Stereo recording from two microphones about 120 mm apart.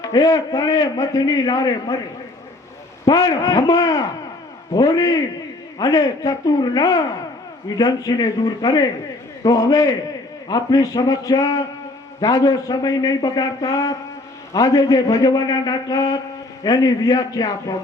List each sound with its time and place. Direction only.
0.0 s a man's voice: 30° left (ahead or behind)
3.1 s a man's voice: 30° left (ahead or behind)